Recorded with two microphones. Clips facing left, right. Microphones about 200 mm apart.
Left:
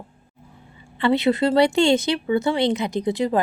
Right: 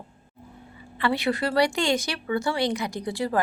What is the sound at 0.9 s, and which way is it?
Speech, 25° left (ahead or behind).